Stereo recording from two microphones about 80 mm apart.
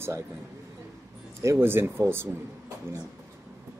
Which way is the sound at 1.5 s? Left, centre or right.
Right.